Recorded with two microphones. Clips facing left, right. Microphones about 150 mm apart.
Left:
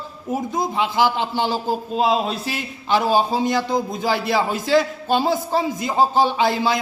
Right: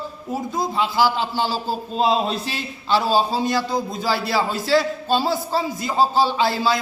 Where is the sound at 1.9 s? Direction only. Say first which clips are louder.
Right 1 dB; 5° left (ahead or behind).